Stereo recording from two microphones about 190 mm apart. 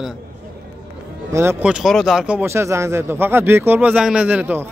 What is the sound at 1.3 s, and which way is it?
Speech, 15° right (ahead or behind).